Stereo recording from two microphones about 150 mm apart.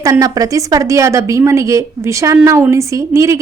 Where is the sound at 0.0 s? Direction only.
25° right (ahead or behind).